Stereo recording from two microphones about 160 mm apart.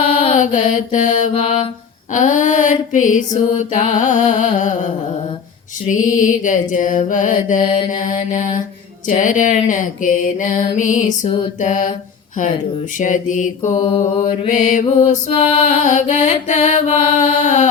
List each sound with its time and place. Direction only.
0.3 s mantra: 50° left (ahead or behind)
0.7 s music: 50° left (ahead or behind)
1.3 s mantra: 35° left (ahead or behind)
2.1 s female singing: 50° left (ahead or behind)
3.3 s music: 50° left (ahead or behind)
5.9 s music: 55° left (ahead or behind)
7.6 s music: 30° left (ahead or behind)
7.9 s music: 50° left (ahead or behind)
13.0 s music: 55° left (ahead or behind)
15.3 s music: 30° left (ahead or behind)
15.7 s music: 50° left (ahead or behind)